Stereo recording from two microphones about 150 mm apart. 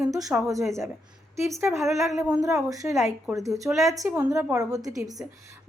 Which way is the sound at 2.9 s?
20° right (ahead or behind).